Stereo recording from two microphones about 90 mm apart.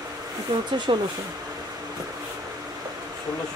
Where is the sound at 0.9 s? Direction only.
75° right (ahead or behind).